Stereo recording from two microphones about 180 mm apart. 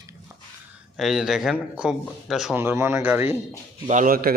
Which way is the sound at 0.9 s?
Centre (ahead or behind).